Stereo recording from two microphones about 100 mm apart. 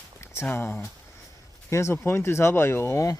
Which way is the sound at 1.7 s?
25° left (ahead or behind).